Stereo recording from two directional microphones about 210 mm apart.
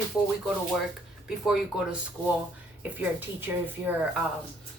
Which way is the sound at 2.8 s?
10° right (ahead or behind).